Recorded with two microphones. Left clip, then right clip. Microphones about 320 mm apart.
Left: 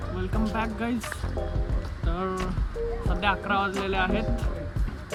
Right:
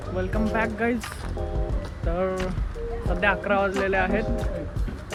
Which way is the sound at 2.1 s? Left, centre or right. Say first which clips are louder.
Right 4 dB; centre.